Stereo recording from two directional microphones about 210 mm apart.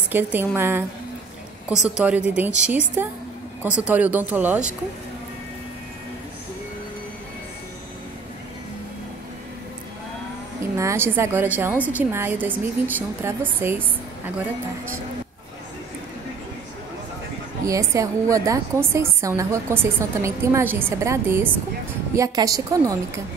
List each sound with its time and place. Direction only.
0.1 s a woman's voice: 10° right (ahead or behind)
10.8 s a woman's voice: 10° right (ahead or behind)
17.6 s a woman's voice: 15° right (ahead or behind)